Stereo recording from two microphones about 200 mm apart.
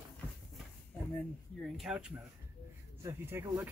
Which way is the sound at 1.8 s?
5° right (ahead or behind).